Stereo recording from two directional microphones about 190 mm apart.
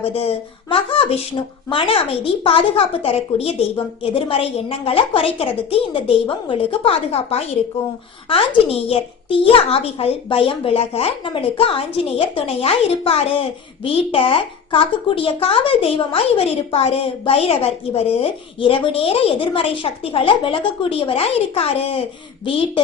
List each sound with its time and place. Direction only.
0.0 s a woman's voice: 30° left (ahead or behind)